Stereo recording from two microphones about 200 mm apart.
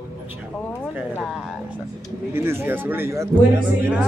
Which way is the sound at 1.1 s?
Centre (ahead or behind).